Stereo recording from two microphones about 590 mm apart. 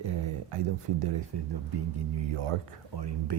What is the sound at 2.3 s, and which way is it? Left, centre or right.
Speech, right.